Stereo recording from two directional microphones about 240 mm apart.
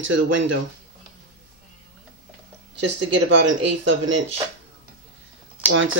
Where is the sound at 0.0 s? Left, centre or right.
Right.